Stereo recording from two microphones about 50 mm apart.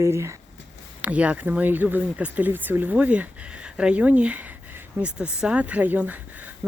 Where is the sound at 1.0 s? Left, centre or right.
Right.